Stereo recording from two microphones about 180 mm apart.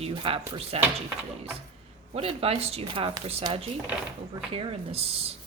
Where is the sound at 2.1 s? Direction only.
35° right (ahead or behind).